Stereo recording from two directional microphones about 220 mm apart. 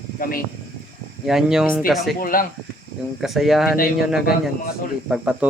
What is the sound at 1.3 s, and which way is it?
Speech, centre (ahead or behind).